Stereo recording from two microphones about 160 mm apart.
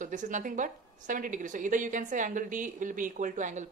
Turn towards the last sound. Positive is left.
turn(degrees=-50)  # may be behind; listen again after turning